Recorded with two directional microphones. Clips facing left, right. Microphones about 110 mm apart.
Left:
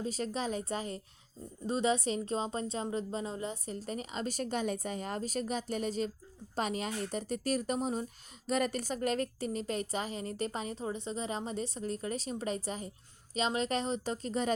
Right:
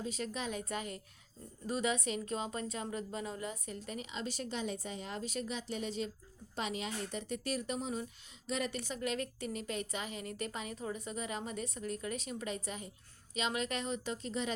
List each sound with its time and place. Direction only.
0.0 s a woman's voice: 35° left (ahead or behind)